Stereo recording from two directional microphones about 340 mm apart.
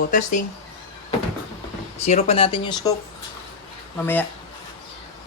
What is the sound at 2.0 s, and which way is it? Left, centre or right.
Speech, centre.